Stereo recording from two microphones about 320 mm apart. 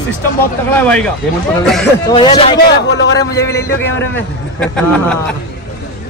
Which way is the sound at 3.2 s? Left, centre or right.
Centre.